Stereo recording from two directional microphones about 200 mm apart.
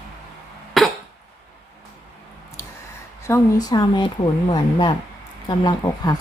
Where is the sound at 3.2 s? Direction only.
15° left (ahead or behind).